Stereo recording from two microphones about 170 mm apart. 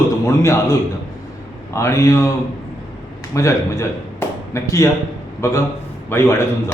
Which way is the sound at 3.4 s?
20° left (ahead or behind).